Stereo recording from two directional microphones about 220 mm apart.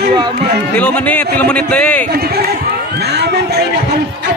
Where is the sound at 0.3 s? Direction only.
50° right (ahead or behind).